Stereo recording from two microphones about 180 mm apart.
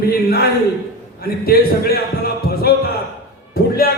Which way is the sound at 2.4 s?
60° left (ahead or behind).